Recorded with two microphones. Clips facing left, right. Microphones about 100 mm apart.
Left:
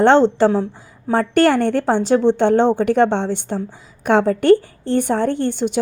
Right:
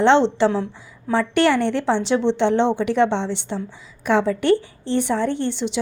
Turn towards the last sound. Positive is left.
turn(degrees=50)  # may be behind; listen again after turning